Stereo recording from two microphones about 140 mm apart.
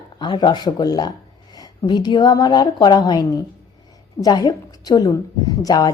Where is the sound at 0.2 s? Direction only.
35° left (ahead or behind).